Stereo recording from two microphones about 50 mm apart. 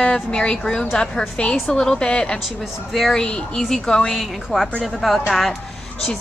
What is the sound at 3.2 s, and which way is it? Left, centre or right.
A woman's voice, centre.